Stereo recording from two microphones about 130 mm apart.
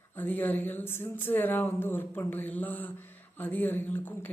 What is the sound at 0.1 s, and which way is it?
Speech, 15° left (ahead or behind).